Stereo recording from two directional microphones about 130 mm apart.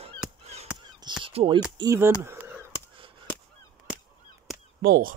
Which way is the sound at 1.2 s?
45° right (ahead or behind).